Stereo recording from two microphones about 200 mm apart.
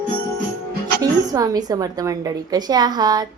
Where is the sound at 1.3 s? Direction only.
20° right (ahead or behind).